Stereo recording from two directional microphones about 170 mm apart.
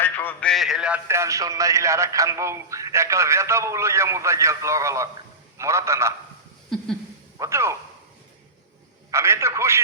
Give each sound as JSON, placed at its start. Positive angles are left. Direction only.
{"t": 0.0, "sound": "a man's voice", "side_deg": 10}
{"t": 7.3, "sound": "speech", "side_deg": -15}
{"t": 9.0, "sound": "a man's voice", "side_deg": -15}